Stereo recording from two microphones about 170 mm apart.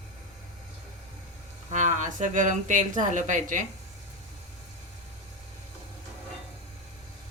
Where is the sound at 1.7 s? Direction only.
45° right (ahead or behind).